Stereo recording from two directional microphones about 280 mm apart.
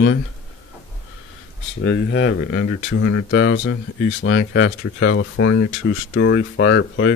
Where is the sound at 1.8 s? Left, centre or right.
Left.